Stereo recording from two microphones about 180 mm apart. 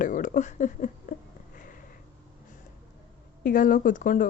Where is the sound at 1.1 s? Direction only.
45° left (ahead or behind).